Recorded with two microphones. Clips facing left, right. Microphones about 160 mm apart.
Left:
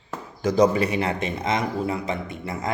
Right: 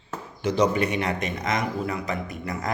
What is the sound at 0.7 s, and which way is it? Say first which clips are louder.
Speech: left 2 dB; 30° left (ahead or behind).